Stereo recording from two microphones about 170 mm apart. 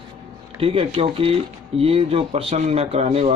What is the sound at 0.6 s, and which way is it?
A man's voice, 35° right (ahead or behind).